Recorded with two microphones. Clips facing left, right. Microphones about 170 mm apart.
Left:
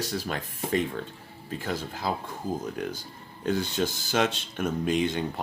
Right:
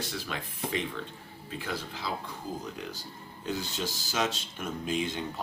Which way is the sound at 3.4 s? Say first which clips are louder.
Left 7 dB; 55° left (ahead or behind).